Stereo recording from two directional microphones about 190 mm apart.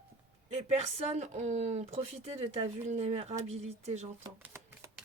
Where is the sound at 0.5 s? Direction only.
35° right (ahead or behind).